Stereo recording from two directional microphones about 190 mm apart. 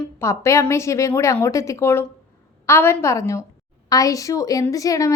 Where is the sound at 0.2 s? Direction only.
15° left (ahead or behind).